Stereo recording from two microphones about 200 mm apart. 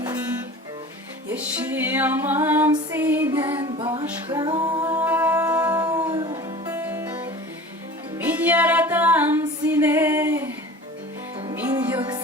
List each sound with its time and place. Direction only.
1.3 s music: 10° right (ahead or behind)
3.6 s music: 25° right (ahead or behind)
6.7 s music: 10° right (ahead or behind)
11.5 s music: 10° right (ahead or behind)